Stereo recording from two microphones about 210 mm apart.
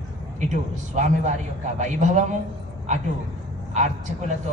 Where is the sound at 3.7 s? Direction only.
35° right (ahead or behind).